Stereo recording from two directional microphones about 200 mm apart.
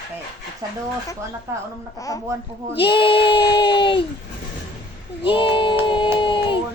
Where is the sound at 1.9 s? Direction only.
15° left (ahead or behind).